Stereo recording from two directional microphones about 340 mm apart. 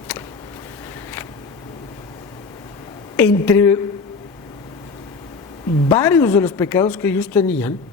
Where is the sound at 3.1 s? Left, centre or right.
Centre.